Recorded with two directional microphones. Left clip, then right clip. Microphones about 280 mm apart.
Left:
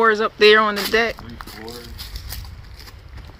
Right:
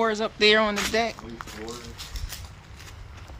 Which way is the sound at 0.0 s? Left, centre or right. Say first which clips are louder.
Left 8 dB; centre.